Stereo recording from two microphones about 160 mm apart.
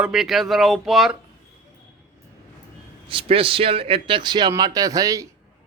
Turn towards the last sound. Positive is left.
turn(degrees=-20)  # may be behind; listen again after turning